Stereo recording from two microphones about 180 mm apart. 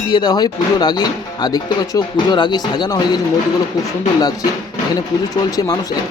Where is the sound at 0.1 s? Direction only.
25° left (ahead or behind).